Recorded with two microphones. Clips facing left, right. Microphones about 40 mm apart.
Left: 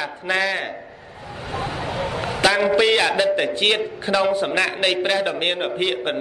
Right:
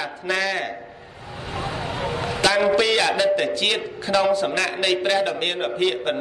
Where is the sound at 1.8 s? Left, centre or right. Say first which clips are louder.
Left 1 dB; left.